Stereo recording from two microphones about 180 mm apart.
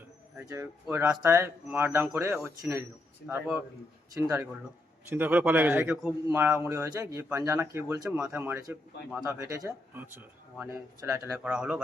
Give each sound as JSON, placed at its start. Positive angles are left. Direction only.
{"t": 0.3, "sound": "speech", "side_deg": -15}
{"t": 4.1, "sound": "speech", "side_deg": -10}
{"t": 9.4, "sound": "speech", "side_deg": -15}